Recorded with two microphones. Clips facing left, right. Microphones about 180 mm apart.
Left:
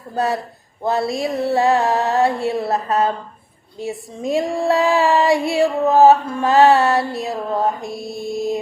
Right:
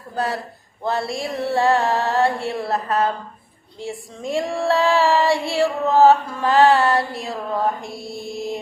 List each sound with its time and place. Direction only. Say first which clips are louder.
0.8 s female singing: left 4 dB; 20° left (ahead or behind)